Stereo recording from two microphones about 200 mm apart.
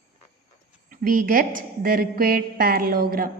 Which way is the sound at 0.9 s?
45° right (ahead or behind).